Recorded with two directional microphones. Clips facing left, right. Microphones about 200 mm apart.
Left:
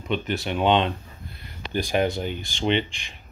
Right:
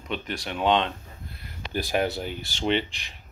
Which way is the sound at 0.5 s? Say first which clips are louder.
Left 2 dB; 5° left (ahead or behind).